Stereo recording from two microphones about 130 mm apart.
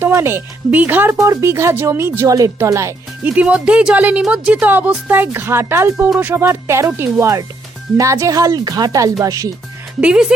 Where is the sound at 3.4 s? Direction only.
10° right (ahead or behind); by 9.5 s 25° right (ahead or behind).